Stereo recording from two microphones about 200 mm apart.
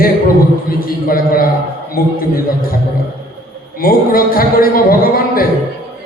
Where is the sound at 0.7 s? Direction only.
45° left (ahead or behind).